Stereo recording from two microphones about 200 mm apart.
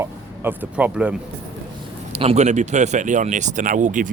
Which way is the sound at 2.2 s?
30° right (ahead or behind).